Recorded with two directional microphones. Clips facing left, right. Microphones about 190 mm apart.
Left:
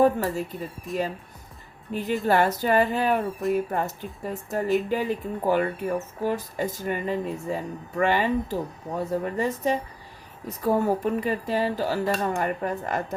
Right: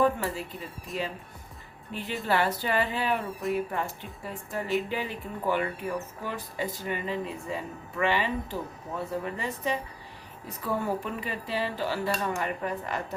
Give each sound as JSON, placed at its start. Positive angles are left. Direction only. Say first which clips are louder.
{"t": 0.0, "sound": "speech", "louder": "left 5 dB", "side_deg": 45}
{"t": 0.9, "sound": "speech", "louder": "left 6 dB", "side_deg": 0}
{"t": 1.9, "sound": "speech", "louder": "left 6 dB", "side_deg": 45}